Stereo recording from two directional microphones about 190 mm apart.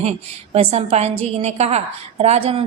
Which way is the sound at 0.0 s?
35° right (ahead or behind).